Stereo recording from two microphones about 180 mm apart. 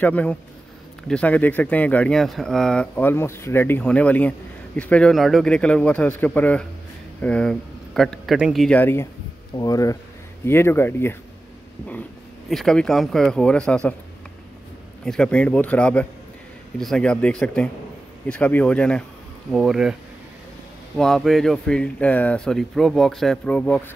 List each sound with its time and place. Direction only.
0.0 s speech: 10° left (ahead or behind)
8.6 s speech: 10° left (ahead or behind)
12.4 s speech: centre (ahead or behind)
15.0 s speech: 5° left (ahead or behind)
21.0 s speech: centre (ahead or behind)